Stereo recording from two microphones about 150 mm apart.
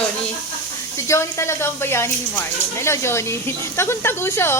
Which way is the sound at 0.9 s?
20° left (ahead or behind).